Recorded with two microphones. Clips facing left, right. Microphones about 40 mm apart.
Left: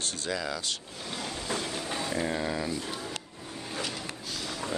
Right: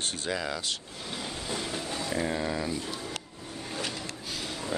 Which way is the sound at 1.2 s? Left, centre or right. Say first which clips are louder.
Left 2 dB; centre.